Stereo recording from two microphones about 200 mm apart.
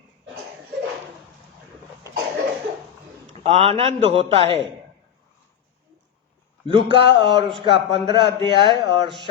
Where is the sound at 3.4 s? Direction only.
30° right (ahead or behind).